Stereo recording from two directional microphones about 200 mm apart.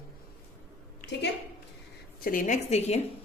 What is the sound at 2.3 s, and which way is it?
Speech, 40° left (ahead or behind).